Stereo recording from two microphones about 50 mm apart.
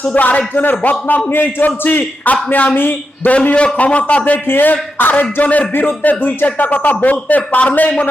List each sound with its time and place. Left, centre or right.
0.1 s speech: left
1.3 s a man's voice: left
2.3 s speech: left
3.2 s a man's voice: left
4.4 s speech: left